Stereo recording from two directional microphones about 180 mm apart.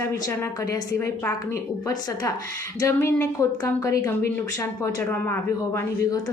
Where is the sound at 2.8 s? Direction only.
15° left (ahead or behind).